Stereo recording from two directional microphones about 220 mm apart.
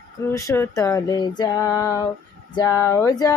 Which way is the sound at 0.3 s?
15° left (ahead or behind).